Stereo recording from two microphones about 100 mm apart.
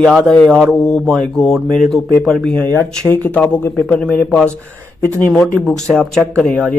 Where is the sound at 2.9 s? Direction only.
15° left (ahead or behind).